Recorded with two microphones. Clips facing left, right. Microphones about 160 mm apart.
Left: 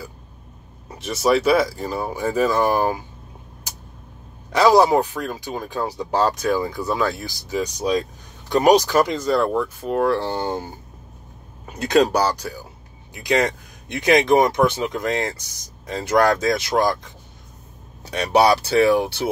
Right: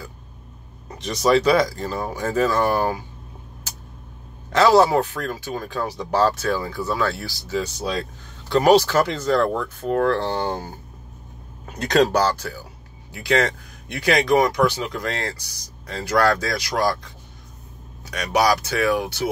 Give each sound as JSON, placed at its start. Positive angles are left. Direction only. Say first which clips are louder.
{"t": 0.8, "sound": "speech", "louder": "even", "side_deg": 5}
{"t": 4.5, "sound": "speech", "louder": "left 1 dB", "side_deg": 10}
{"t": 11.7, "sound": "speech", "louder": "left 1 dB", "side_deg": 10}